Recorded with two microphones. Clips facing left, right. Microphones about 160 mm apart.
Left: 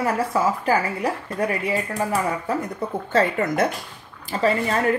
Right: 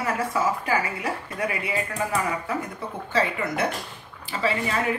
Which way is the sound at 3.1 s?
45° left (ahead or behind).